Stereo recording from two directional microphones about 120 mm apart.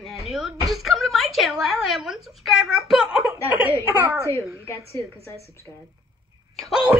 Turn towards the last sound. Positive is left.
turn(degrees=-5)  # may be behind; listen again after turning